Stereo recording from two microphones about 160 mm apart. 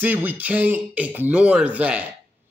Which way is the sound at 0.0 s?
10° right (ahead or behind).